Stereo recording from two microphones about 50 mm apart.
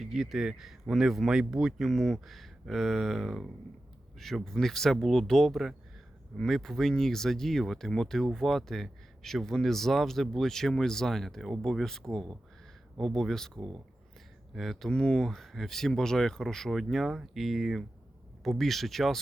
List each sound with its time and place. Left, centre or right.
0.0 s speech: centre
1.9 s speech: centre
14.9 s speech: centre